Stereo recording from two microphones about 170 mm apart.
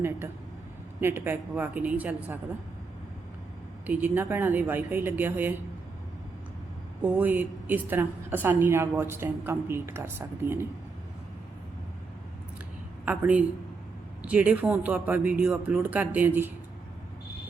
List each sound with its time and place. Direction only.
1.0 s a woman's voice: 15° right (ahead or behind)
3.8 s a woman's voice: 10° right (ahead or behind)
7.0 s a woman's voice: 10° right (ahead or behind)
13.1 s a woman's voice: 10° right (ahead or behind)